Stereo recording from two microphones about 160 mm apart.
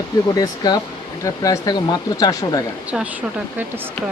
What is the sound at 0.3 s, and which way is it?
Speech, 25° left (ahead or behind).